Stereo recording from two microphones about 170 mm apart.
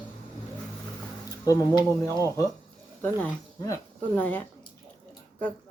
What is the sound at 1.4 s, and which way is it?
Speech, 20° left (ahead or behind).